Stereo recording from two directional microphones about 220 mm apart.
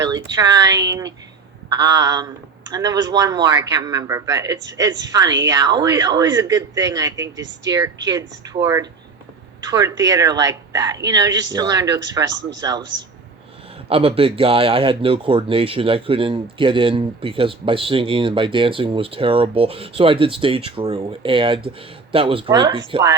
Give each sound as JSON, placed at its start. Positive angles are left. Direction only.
{"t": 0.0, "sound": "speech", "side_deg": -15}
{"t": 11.3, "sound": "speech", "side_deg": -55}
{"t": 11.5, "sound": "speech", "side_deg": -15}
{"t": 12.2, "sound": "speech", "side_deg": -55}
{"t": 12.5, "sound": "speech", "side_deg": -15}
{"t": 13.9, "sound": "speech", "side_deg": -25}